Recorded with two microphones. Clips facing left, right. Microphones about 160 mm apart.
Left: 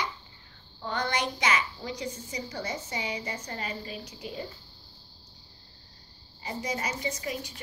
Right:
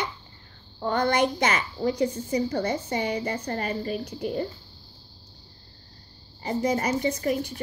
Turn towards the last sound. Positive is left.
turn(degrees=-55)  # may be behind; listen again after turning